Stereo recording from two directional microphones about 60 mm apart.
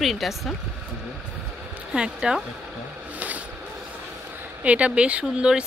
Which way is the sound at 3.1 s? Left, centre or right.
Right.